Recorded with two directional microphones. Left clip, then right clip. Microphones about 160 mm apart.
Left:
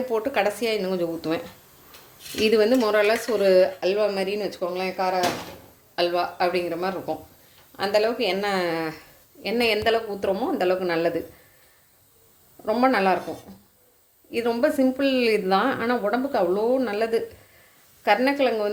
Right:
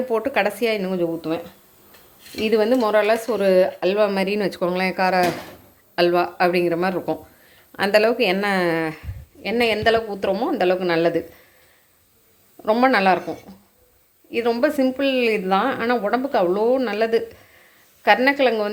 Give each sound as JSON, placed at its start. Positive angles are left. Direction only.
{"t": 0.1, "sound": "speech", "side_deg": -25}
{"t": 1.2, "sound": "speech", "side_deg": 0}
{"t": 2.4, "sound": "speech", "side_deg": -15}
{"t": 6.0, "sound": "speech", "side_deg": -35}
{"t": 8.8, "sound": "speech", "side_deg": -15}
{"t": 12.6, "sound": "speech", "side_deg": -25}
{"t": 14.3, "sound": "speech", "side_deg": -10}